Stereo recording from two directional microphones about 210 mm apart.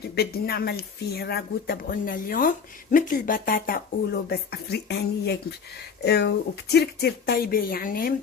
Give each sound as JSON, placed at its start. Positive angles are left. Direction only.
{"t": 0.2, "sound": "speech", "side_deg": 50}